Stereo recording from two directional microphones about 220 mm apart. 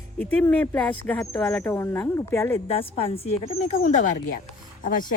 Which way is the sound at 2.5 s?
25° left (ahead or behind).